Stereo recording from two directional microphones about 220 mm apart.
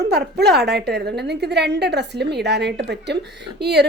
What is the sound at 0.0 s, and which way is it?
A woman's voice, 50° right (ahead or behind).